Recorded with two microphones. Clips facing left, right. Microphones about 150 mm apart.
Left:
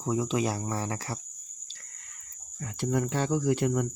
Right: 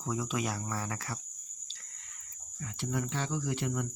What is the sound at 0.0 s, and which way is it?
Speech, 25° left (ahead or behind).